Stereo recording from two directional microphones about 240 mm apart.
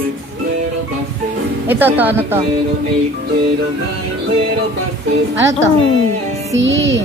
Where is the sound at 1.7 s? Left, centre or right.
Centre.